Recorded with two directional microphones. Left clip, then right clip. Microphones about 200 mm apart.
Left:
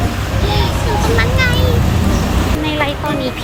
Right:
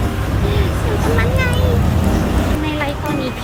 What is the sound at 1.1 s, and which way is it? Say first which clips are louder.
Speech: left 5 dB; 10° right (ahead or behind).